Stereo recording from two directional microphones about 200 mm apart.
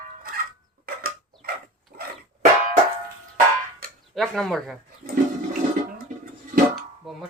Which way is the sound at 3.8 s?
45° right (ahead or behind).